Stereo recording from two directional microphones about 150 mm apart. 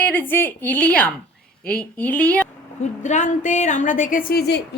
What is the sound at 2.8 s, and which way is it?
A woman's voice, 55° left (ahead or behind).